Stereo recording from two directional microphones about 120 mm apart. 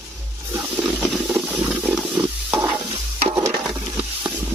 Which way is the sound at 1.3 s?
10° right (ahead or behind).